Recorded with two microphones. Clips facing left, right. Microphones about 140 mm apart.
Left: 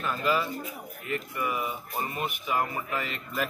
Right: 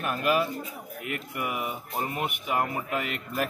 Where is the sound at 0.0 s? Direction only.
60° right (ahead or behind).